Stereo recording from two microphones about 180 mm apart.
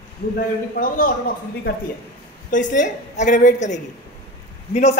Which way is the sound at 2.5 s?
45° left (ahead or behind).